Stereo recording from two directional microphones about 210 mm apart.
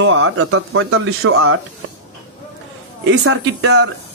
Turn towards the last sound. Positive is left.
turn(degrees=-60)  # may be behind; listen again after turning